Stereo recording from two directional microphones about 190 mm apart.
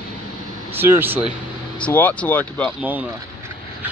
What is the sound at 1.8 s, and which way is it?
Speech, 10° left (ahead or behind).